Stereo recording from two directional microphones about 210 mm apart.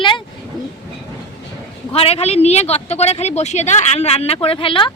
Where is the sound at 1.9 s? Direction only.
30° left (ahead or behind).